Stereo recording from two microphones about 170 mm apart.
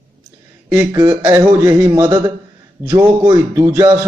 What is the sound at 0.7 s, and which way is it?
A man's voice, 10° right (ahead or behind).